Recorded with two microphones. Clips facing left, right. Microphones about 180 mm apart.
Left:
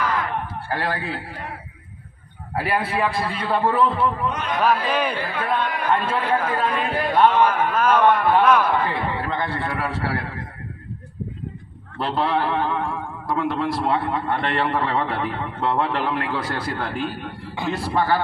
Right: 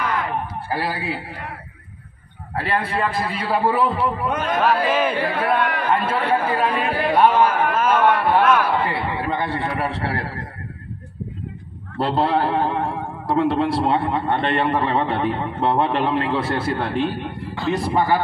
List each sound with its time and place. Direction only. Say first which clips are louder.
0.7 s a man's voice: even; 10° right (ahead or behind)
2.5 s a man's voice: even; 10° left (ahead or behind); by 4.3 s 10° right (ahead or behind)
4.3 s a man's voice: right 4 dB; 50° right (ahead or behind)
4.6 s a man's voice: right 1 dB; centre (ahead or behind)
5.2 s speech: right 4 dB; 70° right (ahead or behind)
5.9 s a man's voice: even; 10° right (ahead or behind)
12.0 s a man's voice: right 3 dB; 35° right (ahead or behind); by 18.2 s 15° right (ahead or behind)